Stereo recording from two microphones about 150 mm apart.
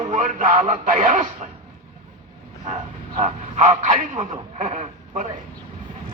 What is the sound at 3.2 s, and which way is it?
Speech, 55° right (ahead or behind).